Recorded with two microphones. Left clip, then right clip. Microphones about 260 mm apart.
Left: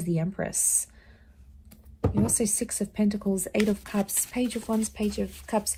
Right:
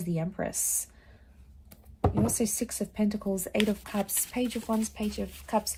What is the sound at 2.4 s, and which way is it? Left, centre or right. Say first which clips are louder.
Speech: left 2 dB; left.